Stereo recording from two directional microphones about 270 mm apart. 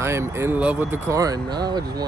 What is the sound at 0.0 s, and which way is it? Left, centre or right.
Speech, centre.